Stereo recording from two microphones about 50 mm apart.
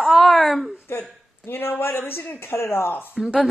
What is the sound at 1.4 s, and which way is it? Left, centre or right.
Speech, left.